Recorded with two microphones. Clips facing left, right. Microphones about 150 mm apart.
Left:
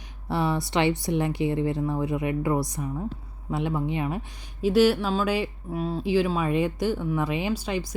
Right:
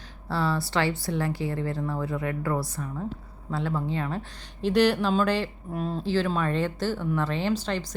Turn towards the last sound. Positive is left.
turn(degrees=10)  # may be behind; listen again after turning